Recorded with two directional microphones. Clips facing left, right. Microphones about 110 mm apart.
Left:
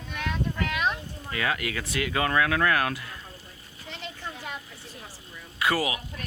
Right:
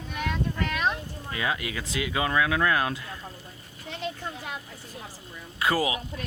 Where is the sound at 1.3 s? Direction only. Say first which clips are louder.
Left 1 dB; 20° right (ahead or behind).